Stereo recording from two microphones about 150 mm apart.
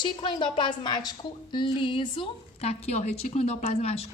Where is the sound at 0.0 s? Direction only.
30° left (ahead or behind).